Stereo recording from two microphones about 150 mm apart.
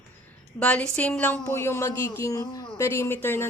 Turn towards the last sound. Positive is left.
turn(degrees=15)  # may be behind; listen again after turning